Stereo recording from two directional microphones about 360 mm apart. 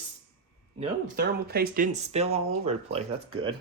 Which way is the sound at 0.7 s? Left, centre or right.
Right.